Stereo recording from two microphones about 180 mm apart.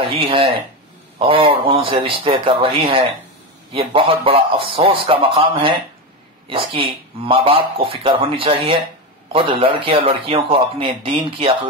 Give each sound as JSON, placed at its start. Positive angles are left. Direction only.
{"t": 0.0, "sound": "speech", "side_deg": -30}